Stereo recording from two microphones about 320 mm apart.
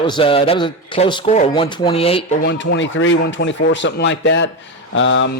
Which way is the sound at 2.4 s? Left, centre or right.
Left.